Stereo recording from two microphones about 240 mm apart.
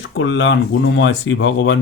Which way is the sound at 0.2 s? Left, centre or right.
Left.